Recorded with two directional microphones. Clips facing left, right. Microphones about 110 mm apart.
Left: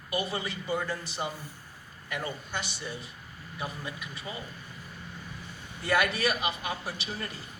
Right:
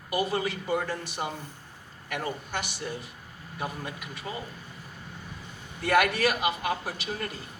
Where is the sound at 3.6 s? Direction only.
60° right (ahead or behind).